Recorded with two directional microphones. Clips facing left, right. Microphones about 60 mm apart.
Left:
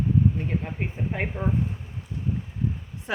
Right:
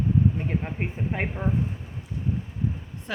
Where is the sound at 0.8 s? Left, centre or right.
Centre.